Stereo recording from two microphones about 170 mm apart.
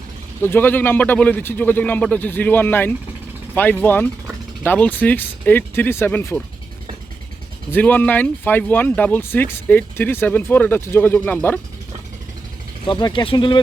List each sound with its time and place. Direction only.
0.4 s speech: 10° left (ahead or behind)
7.7 s speech: 10° left (ahead or behind)
12.9 s speech: 25° left (ahead or behind)